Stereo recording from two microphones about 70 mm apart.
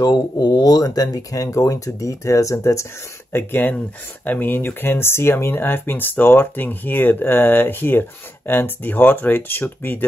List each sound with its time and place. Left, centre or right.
0.0 s speech: left
3.3 s speech: left